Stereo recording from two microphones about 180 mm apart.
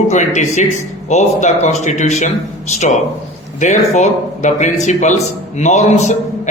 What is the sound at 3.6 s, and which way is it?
A man's voice, 40° left (ahead or behind).